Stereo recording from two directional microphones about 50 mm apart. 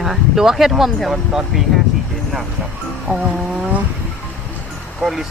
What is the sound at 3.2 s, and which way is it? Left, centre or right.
Vehicle, centre.